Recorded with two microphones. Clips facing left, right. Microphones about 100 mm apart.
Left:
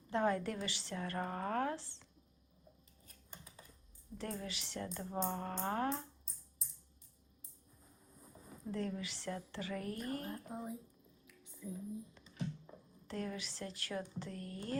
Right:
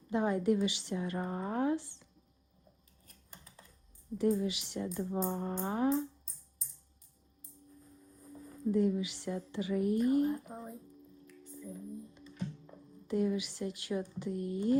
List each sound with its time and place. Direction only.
0.1 s a woman's voice: 15° right (ahead or behind)
4.2 s a woman's voice: 15° right (ahead or behind)
8.2 s a sound: 10° left (ahead or behind)
8.7 s a woman's voice: 15° right (ahead or behind)
10.5 s speech: 5° left (ahead or behind)
11.3 s a sound: centre (ahead or behind)
12.3 s music: centre (ahead or behind)
13.1 s a woman's voice: 15° right (ahead or behind)